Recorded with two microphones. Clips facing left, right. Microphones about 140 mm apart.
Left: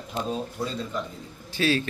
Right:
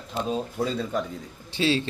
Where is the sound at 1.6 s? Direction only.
25° right (ahead or behind).